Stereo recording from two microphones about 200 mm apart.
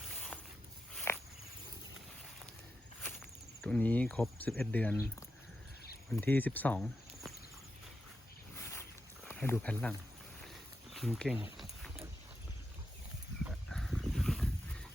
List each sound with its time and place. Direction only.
1.1 s walk: 10° left (ahead or behind)
3.6 s speech: 10° left (ahead or behind)
6.1 s speech: 10° left (ahead or behind)
8.5 s a sound: 15° left (ahead or behind)
10.9 s speech: centre (ahead or behind)
11.5 s a sound: centre (ahead or behind)
13.7 s dog: centre (ahead or behind)